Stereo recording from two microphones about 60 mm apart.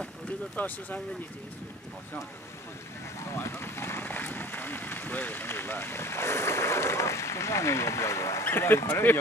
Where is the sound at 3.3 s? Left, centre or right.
Left.